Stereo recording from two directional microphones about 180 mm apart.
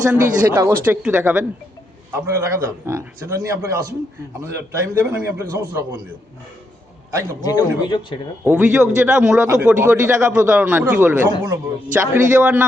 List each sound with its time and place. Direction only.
0.1 s a man's voice: 15° right (ahead or behind)
7.4 s speech: 25° left (ahead or behind)
8.4 s a man's voice: 5° right (ahead or behind)